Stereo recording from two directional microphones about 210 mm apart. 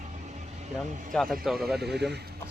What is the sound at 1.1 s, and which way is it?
Speech, centre (ahead or behind).